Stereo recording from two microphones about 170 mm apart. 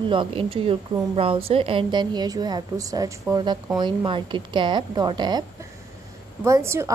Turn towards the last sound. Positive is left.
turn(degrees=-15)  # may be behind; listen again after turning